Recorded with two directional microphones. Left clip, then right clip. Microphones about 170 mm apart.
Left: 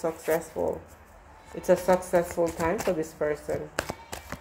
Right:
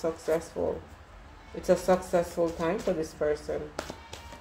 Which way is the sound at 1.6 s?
25° left (ahead or behind).